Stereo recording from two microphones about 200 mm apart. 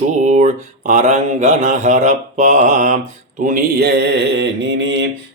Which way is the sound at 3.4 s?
45° right (ahead or behind).